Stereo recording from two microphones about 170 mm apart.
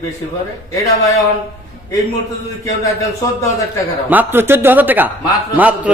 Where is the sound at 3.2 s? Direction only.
20° left (ahead or behind).